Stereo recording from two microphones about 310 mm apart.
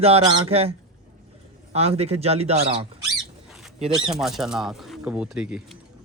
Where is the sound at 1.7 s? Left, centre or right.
Centre.